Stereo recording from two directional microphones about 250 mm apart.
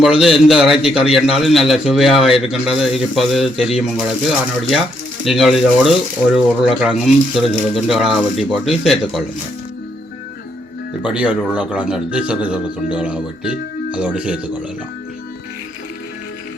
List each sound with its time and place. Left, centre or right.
0.0 s speech: centre
11.0 s speech: centre